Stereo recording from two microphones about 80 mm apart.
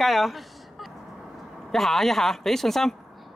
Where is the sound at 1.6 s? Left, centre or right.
Centre.